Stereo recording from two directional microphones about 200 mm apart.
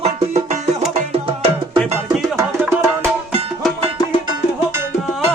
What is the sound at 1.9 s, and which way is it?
Music, 10° right (ahead or behind).